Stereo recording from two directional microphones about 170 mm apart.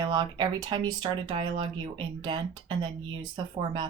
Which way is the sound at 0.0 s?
25° right (ahead or behind).